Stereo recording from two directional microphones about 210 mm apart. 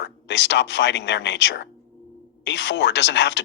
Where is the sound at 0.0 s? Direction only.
55° left (ahead or behind).